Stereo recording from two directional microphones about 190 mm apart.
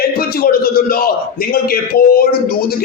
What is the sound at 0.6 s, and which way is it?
Speech, 50° left (ahead or behind).